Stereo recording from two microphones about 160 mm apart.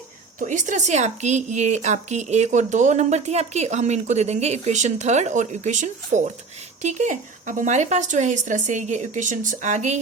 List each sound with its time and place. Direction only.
0.3 s a woman's voice: 50° right (ahead or behind)